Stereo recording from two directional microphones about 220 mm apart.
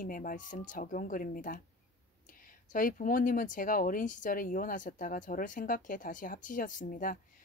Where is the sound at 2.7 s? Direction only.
40° left (ahead or behind).